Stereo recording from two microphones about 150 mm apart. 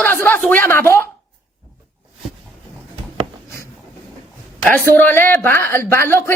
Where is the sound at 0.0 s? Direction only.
15° left (ahead or behind).